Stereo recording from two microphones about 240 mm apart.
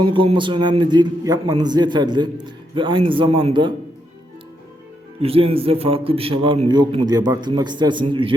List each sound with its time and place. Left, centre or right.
0.1 s a man's voice: right
5.2 s a man's voice: right